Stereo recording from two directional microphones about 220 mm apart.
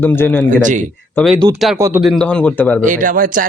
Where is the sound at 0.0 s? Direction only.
10° left (ahead or behind).